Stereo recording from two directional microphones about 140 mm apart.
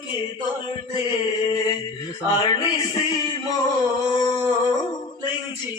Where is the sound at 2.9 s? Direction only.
30° left (ahead or behind).